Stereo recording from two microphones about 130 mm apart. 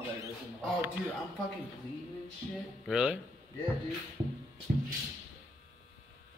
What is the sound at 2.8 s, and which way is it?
Speech, 5° right (ahead or behind).